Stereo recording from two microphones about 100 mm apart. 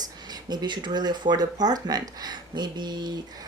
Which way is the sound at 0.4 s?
45° right (ahead or behind).